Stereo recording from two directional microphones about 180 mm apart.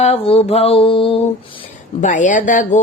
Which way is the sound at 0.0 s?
35° left (ahead or behind).